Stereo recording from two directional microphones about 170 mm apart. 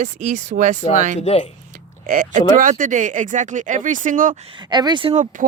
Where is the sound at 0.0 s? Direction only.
45° right (ahead or behind).